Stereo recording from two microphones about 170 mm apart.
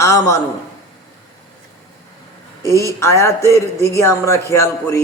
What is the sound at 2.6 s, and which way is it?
A man's voice, 15° left (ahead or behind).